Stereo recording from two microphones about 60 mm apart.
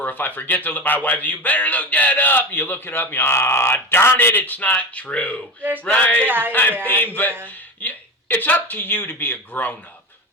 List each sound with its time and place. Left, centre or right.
0.0 s speech: left
5.8 s a sound: left
6.2 s speech: right
6.5 s speech: left